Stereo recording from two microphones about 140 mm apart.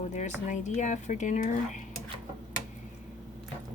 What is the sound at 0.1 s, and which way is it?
Speech, 60° left (ahead or behind).